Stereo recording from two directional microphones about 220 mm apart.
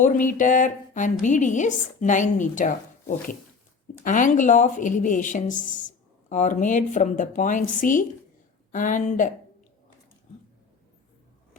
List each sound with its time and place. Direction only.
0.0 s a woman's voice: 35° left (ahead or behind)